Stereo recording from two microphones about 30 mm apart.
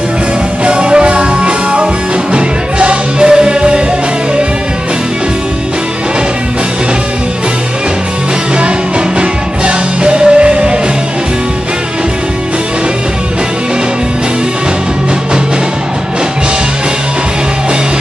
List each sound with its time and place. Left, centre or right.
0.7 s music: right
9.2 s music: right